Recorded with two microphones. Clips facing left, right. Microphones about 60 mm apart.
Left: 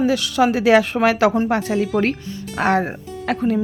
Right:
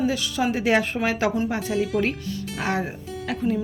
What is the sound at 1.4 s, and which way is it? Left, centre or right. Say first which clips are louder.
Speech: left 5 dB; left.